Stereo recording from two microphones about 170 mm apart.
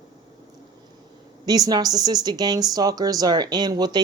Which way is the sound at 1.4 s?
25° right (ahead or behind).